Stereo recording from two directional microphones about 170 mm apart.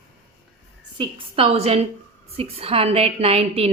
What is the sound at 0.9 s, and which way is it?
A woman's voice, 30° right (ahead or behind).